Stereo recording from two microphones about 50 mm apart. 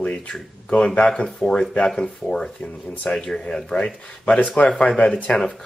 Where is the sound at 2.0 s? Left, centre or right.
Centre; by 5.3 s left.